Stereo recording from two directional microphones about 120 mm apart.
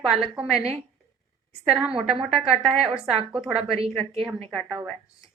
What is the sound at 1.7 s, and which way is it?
A woman's voice, 5° right (ahead or behind).